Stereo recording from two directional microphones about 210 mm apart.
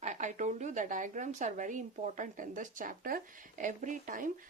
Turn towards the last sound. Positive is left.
turn(degrees=-40)  # may be behind; listen again after turning